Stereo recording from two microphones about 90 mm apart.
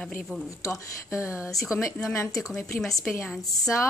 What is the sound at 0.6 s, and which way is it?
Speech, 35° left (ahead or behind).